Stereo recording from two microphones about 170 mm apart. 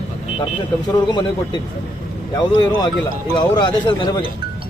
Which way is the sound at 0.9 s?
25° left (ahead or behind).